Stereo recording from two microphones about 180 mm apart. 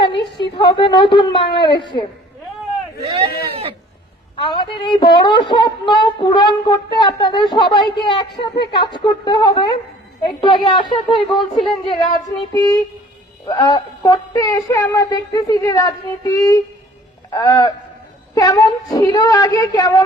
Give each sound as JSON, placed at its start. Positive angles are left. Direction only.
{"t": 0.3, "sound": "a woman's voice", "side_deg": 25}
{"t": 4.4, "sound": "speech", "side_deg": 25}
{"t": 11.5, "sound": "speech", "side_deg": 0}
{"t": 11.9, "sound": "speech", "side_deg": 25}